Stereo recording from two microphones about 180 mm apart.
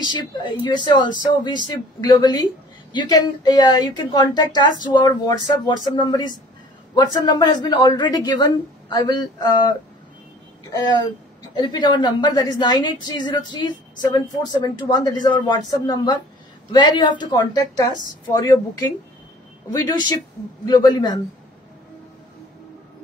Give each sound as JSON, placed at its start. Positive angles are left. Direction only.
{"t": 0.0, "sound": "a woman's voice", "side_deg": 25}
{"t": 19.7, "sound": "a woman's voice", "side_deg": 20}